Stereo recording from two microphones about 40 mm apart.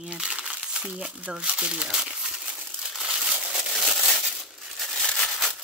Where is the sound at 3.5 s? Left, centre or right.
Centre.